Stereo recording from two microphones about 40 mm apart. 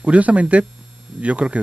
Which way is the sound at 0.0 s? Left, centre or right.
Right.